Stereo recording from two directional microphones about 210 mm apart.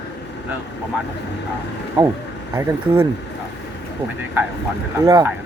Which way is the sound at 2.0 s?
20° right (ahead or behind).